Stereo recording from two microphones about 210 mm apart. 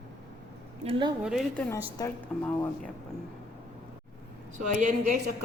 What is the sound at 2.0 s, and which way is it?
Speech, 15° left (ahead or behind).